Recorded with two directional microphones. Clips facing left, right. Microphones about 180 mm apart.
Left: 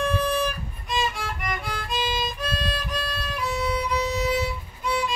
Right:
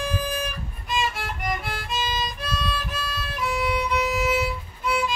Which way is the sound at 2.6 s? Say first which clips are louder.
Left 1 dB; 45° left (ahead or behind).